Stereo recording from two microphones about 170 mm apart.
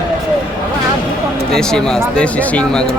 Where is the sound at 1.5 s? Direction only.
5° left (ahead or behind).